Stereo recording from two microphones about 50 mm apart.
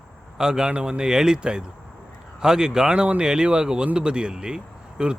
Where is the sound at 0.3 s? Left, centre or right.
Centre.